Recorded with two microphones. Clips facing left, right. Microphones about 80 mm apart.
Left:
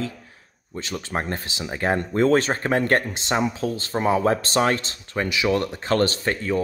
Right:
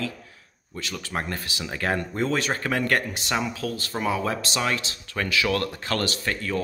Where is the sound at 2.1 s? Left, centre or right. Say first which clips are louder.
Left 6 dB; left.